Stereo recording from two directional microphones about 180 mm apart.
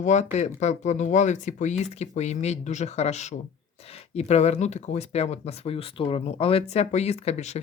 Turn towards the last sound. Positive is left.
turn(degrees=40)  # may be behind; listen again after turning